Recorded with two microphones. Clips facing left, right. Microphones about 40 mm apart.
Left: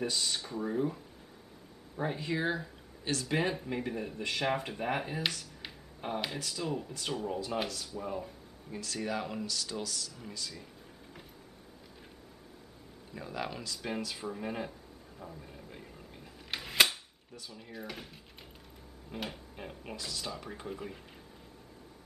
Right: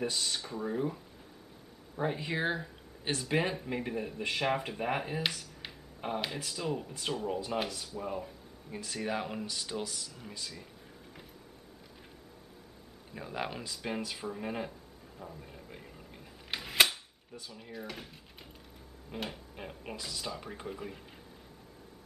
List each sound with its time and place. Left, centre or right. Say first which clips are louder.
0.1 s speech: left 1 dB; centre
8.7 s speech: even; centre
13.1 s speech: right 1 dB; centre
13.8 s speech: even; centre
16.5 s a sound: even; centre
17.5 s speech: even; centre